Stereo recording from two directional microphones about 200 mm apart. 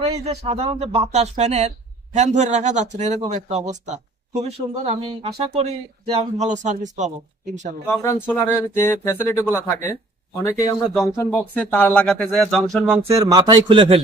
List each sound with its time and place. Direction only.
0.0 s speech: 30° right (ahead or behind)
7.9 s speech: 15° left (ahead or behind)
13.1 s speech: 20° right (ahead or behind)